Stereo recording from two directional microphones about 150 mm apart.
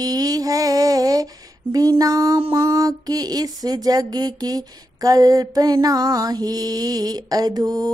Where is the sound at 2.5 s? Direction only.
20° right (ahead or behind).